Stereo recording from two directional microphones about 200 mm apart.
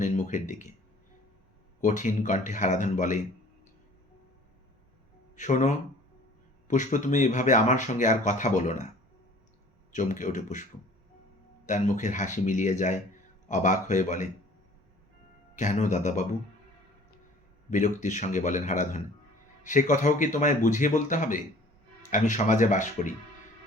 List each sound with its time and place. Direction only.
0.0 s speech: 40° left (ahead or behind)
1.8 s speech: 40° left (ahead or behind)
5.4 s speech: 40° left (ahead or behind)
9.9 s speech: 40° left (ahead or behind)
15.5 s speech: 40° left (ahead or behind)
17.7 s speech: 40° left (ahead or behind)